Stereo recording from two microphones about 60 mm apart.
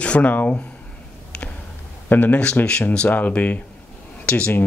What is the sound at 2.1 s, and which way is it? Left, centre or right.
Speech, left.